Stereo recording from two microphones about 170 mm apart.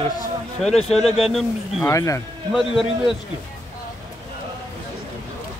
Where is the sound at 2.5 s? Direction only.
Centre (ahead or behind).